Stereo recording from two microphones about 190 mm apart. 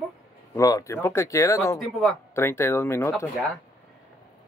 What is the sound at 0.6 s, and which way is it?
Speech, 15° left (ahead or behind).